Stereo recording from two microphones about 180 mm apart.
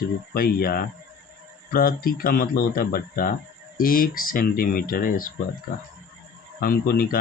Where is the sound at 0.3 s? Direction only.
55° left (ahead or behind).